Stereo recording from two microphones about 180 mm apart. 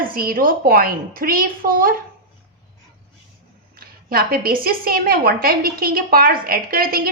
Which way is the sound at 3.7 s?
55° right (ahead or behind).